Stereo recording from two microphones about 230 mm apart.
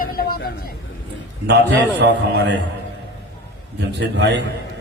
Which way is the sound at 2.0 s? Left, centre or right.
Right.